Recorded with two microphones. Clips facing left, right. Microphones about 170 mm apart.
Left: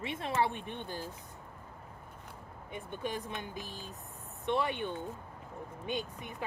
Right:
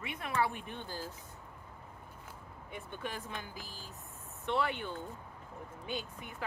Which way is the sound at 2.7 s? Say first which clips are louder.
Left 4 dB; 20° left (ahead or behind).